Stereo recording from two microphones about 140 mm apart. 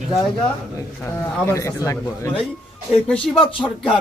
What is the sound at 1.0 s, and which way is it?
Speech, 20° left (ahead or behind).